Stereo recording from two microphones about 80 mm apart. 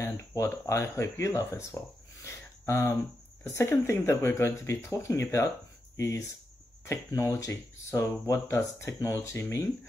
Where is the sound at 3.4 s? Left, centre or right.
Left.